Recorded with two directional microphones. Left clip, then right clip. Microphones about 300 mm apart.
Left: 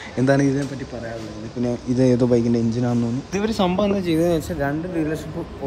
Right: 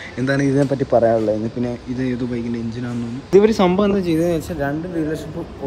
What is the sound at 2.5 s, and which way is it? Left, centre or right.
Speech, centre.